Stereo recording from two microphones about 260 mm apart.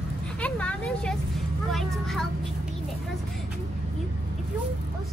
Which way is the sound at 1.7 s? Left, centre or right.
Centre.